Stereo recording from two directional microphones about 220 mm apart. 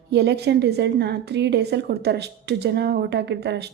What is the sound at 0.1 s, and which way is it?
A woman's voice, 50° right (ahead or behind).